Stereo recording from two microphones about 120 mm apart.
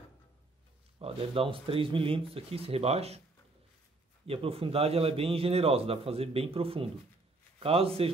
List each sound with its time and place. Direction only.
0.9 s a man's voice: 50° right (ahead or behind)
4.3 s a man's voice: 55° right (ahead or behind)